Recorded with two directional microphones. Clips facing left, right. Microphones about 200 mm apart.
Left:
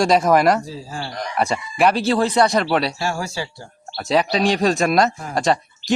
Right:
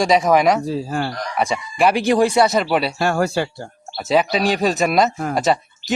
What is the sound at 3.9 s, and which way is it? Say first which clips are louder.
A man's voice: right 1 dB; 5° right (ahead or behind).